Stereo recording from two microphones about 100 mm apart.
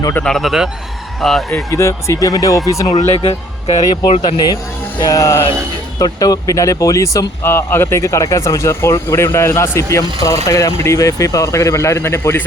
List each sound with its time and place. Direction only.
0.3 s speech: centre (ahead or behind)
1.7 s speech: 30° left (ahead or behind)
3.2 s speech: 90° left
4.9 s speech: 35° left (ahead or behind)